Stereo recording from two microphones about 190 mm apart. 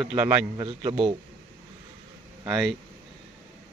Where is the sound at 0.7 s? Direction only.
25° right (ahead or behind).